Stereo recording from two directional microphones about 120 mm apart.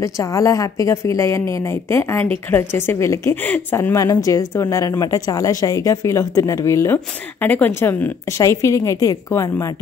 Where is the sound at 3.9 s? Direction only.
30° left (ahead or behind).